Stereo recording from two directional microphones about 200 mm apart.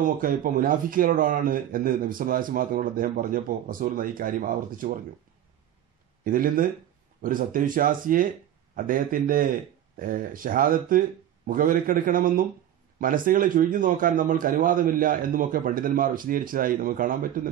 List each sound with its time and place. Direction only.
0.0 s speech: 45° right (ahead or behind)
6.2 s speech: 45° right (ahead or behind)